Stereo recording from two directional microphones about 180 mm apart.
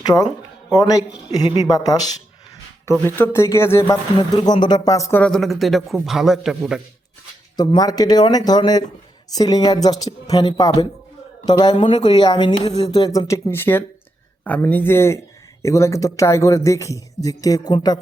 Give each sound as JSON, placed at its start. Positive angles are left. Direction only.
{"t": 0.0, "sound": "speech", "side_deg": 20}
{"t": 3.2, "sound": "a man's voice", "side_deg": 15}
{"t": 5.2, "sound": "a man's voice", "side_deg": 0}
{"t": 7.5, "sound": "a man's voice", "side_deg": 20}